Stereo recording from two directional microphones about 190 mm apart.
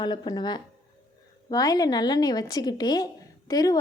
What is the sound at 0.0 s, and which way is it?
A woman's voice, 25° left (ahead or behind).